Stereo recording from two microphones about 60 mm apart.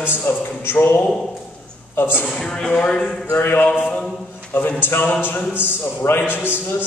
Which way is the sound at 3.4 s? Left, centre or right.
Left.